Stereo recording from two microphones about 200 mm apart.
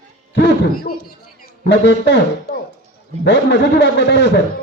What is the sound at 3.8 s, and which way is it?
Speech, 60° left (ahead or behind).